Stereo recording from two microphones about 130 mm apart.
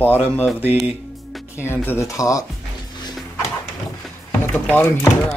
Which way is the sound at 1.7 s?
15° left (ahead or behind).